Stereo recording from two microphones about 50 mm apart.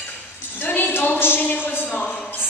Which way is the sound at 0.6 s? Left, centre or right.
Left.